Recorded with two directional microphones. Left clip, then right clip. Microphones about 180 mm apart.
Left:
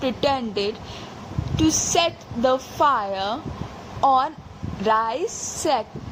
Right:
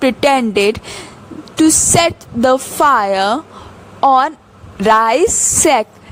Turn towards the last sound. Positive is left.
turn(degrees=-55)  # may be behind; listen again after turning